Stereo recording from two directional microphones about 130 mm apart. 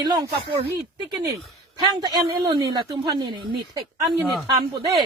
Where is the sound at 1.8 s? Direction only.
35° right (ahead or behind).